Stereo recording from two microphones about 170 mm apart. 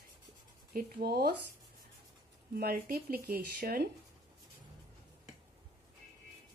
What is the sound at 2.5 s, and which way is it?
Speech, 60° right (ahead or behind).